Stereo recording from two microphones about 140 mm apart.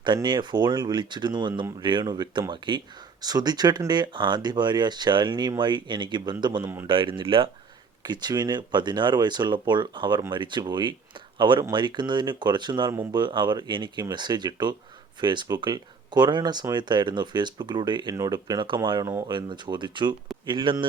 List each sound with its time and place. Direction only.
0.0 s speech: 30° right (ahead or behind)